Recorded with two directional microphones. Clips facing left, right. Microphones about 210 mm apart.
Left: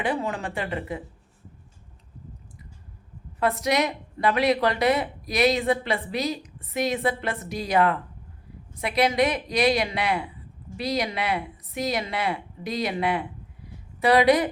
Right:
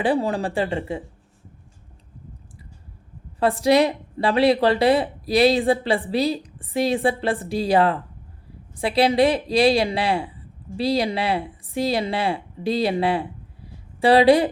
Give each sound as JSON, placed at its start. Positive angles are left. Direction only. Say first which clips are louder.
{"t": 0.0, "sound": "a woman's voice", "louder": "right 6 dB", "side_deg": -35}
{"t": 3.4, "sound": "a woman's voice", "louder": "right 6 dB", "side_deg": -30}